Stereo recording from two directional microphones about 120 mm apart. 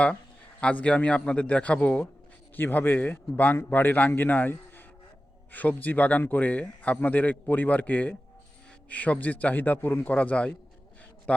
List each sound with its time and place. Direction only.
0.6 s speech: 10° left (ahead or behind)